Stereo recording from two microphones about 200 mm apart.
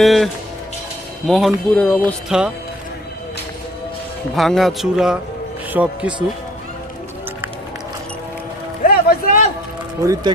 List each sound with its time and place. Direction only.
0.0 s speech: centre (ahead or behind)
1.3 s speech: centre (ahead or behind)
4.4 s speech: centre (ahead or behind)
8.8 s a sound: 40° left (ahead or behind)
10.0 s speech: 15° right (ahead or behind)